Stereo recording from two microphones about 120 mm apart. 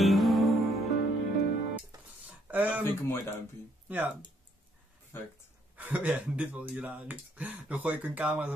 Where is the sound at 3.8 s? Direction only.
15° right (ahead or behind).